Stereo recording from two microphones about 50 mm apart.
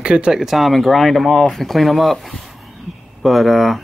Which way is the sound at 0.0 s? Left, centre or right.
Centre.